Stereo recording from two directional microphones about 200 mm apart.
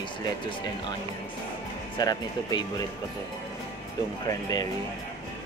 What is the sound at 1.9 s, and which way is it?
Speech, 20° left (ahead or behind).